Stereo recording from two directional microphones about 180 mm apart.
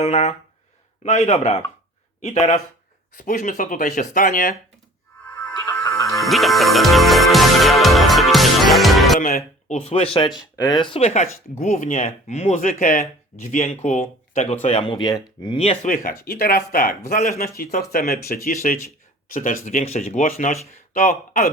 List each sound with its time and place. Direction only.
0.0 s speech: 35° left (ahead or behind)
3.2 s speech: 50° left (ahead or behind)
5.2 s music: 10° left (ahead or behind)
6.2 s music: centre (ahead or behind)
9.2 s speech: 40° left (ahead or behind)
14.8 s speech: 25° left (ahead or behind)
15.9 s speech: 55° left (ahead or behind)